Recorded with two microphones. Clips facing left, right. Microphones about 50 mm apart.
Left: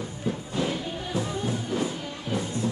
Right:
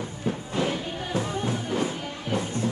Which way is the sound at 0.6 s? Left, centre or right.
Right.